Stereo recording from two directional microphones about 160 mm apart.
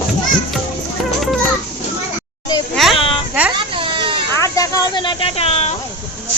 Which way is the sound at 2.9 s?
35° left (ahead or behind).